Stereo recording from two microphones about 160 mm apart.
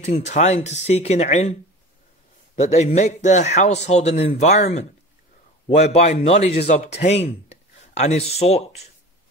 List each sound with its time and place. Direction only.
0.0 s a man's voice: 45° left (ahead or behind)
2.6 s a man's voice: 45° left (ahead or behind)
5.7 s a man's voice: 40° left (ahead or behind)